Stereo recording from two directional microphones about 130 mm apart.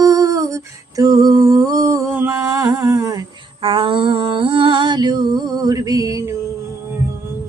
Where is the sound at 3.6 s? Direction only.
40° right (ahead or behind); by 6.3 s 25° right (ahead or behind).